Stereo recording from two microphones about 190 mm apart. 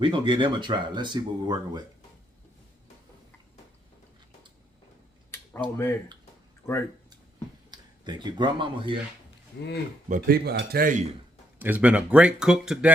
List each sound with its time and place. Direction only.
0.0 s speech: 25° right (ahead or behind)
5.7 s speech: 15° left (ahead or behind)
7.7 s speech: 20° right (ahead or behind)
10.1 s speech: 50° right (ahead or behind)
11.6 s speech: 10° right (ahead or behind)